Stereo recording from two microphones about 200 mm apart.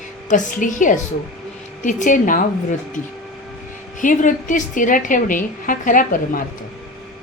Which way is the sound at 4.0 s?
40° left (ahead or behind).